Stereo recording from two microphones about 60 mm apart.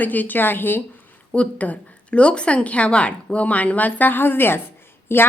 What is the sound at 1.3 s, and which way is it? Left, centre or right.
A woman's voice, left.